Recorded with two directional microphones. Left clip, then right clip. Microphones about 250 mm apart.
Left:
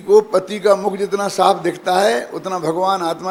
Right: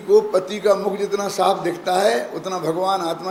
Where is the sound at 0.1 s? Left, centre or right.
Left.